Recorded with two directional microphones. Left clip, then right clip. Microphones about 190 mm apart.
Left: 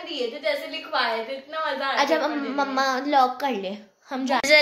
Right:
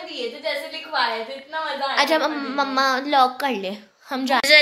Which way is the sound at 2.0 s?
15° right (ahead or behind).